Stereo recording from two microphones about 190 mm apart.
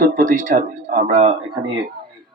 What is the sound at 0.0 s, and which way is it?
Speech, 45° right (ahead or behind).